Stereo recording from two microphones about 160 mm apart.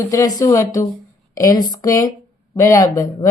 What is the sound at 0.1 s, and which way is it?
A woman's voice, 20° left (ahead or behind).